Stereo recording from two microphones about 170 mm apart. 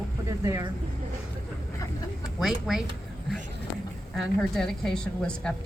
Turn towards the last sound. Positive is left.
turn(degrees=5)  # may be behind; listen again after turning